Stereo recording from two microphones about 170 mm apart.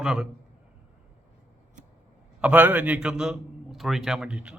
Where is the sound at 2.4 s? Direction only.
10° right (ahead or behind).